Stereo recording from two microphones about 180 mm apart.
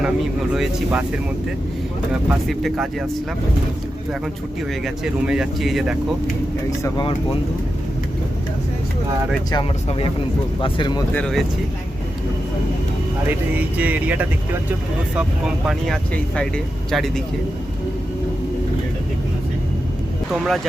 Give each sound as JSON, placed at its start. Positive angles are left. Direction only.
{"t": 0.5, "sound": "speech", "side_deg": -5}
{"t": 2.5, "sound": "speech", "side_deg": 0}
{"t": 5.2, "sound": "speech", "side_deg": -5}
{"t": 6.7, "sound": "speech", "side_deg": 20}
{"t": 9.5, "sound": "speech", "side_deg": 25}
{"t": 11.1, "sound": "speech", "side_deg": 5}
{"t": 13.6, "sound": "speech", "side_deg": -10}
{"t": 15.6, "sound": "speech", "side_deg": 5}
{"t": 20.3, "sound": "speech", "side_deg": 0}